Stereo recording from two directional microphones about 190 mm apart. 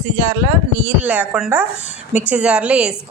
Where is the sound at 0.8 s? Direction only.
10° right (ahead or behind).